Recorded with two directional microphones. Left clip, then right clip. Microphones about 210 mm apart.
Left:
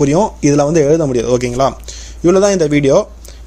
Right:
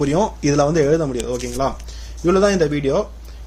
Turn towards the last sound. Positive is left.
turn(degrees=40)  # may be behind; listen again after turning